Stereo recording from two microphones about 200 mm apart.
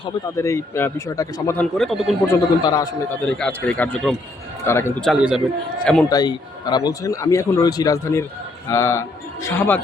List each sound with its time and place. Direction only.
0.3 s a man's voice: 15° left (ahead or behind)
1.7 s speech: centre (ahead or behind)
2.2 s a man's voice: 15° left (ahead or behind)
3.2 s a man's voice: 5° left (ahead or behind)
5.0 s speech: centre (ahead or behind)
6.1 s a man's voice: 20° left (ahead or behind)